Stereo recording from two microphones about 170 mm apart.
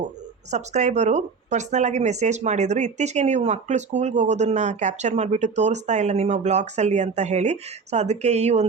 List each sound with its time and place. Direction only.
0.5 s speech: 45° right (ahead or behind)